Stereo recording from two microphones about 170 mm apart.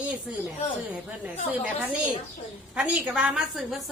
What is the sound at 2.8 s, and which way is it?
A woman's voice, 5° right (ahead or behind).